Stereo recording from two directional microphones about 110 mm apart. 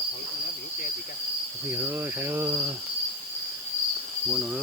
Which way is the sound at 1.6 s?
20° right (ahead or behind).